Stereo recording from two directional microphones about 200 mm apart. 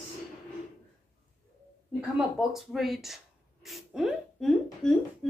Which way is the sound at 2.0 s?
5° right (ahead or behind).